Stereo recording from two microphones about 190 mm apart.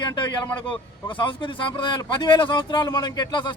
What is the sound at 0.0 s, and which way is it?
A man's voice, 25° left (ahead or behind).